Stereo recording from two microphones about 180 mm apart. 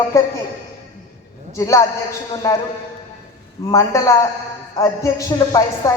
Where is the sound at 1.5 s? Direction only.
20° left (ahead or behind).